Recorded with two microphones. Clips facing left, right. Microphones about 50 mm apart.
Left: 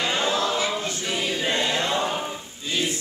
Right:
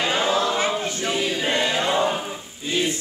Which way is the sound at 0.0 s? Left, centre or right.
Centre.